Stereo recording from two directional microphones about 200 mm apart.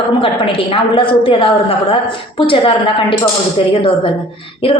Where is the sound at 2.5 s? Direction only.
25° left (ahead or behind).